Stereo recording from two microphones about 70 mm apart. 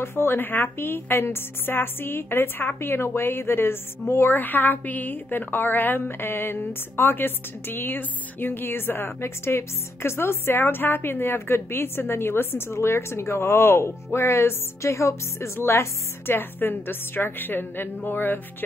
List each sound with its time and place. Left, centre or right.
0.0 s a woman's voice: left